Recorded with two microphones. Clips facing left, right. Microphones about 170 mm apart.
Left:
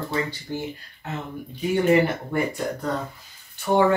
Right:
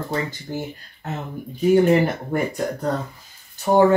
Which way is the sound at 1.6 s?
40° right (ahead or behind).